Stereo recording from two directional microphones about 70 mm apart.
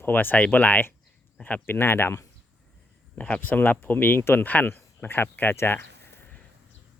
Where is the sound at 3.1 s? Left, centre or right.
Left.